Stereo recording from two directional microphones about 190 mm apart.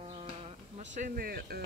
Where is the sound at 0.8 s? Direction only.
40° right (ahead or behind).